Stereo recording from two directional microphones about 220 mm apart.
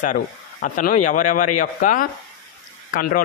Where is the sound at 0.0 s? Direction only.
35° left (ahead or behind).